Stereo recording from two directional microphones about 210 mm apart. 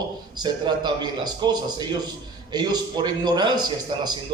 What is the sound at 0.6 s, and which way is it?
A man's voice, 20° right (ahead or behind).